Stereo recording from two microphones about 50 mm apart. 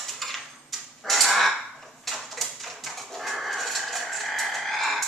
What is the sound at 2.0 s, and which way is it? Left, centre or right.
Dog, centre.